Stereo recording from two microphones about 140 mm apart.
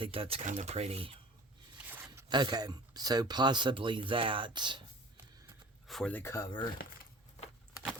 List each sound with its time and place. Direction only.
0.0 s speech: 40° right (ahead or behind)
1.8 s zipper: 15° right (ahead or behind)
2.3 s speech: 30° right (ahead or behind)
5.9 s speech: 5° left (ahead or behind)